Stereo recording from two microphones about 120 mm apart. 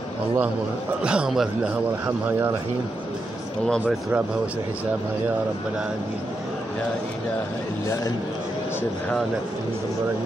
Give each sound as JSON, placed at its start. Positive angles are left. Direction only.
{"t": 1.0, "sound": "a man's voice", "side_deg": -5}
{"t": 2.0, "sound": "speech", "side_deg": -20}